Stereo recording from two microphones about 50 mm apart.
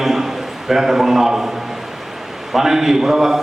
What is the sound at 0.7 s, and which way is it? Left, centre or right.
Speech, centre.